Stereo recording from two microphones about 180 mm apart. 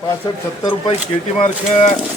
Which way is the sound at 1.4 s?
40° left (ahead or behind).